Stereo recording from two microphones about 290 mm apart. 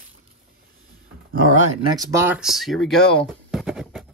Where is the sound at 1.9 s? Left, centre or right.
Centre.